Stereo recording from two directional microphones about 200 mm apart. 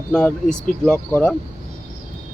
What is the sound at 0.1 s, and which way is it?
Speech, 5° left (ahead or behind).